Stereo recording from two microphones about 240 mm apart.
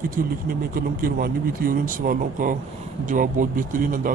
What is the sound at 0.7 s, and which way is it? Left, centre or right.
A man's voice, right.